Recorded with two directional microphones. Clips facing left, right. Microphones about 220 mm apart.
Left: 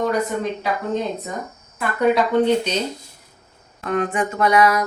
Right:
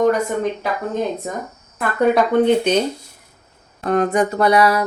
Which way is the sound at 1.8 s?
55° right (ahead or behind).